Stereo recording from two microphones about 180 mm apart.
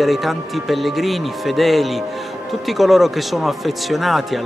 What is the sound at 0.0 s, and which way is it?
Speech, centre (ahead or behind).